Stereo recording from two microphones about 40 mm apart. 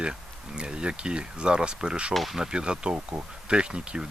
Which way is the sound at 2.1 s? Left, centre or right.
Centre.